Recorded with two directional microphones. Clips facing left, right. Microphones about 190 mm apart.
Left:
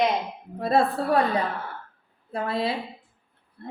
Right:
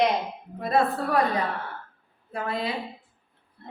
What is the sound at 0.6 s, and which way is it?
Speech, 30° left (ahead or behind).